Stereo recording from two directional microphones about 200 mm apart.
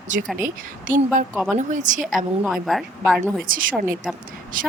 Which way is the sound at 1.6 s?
35° right (ahead or behind).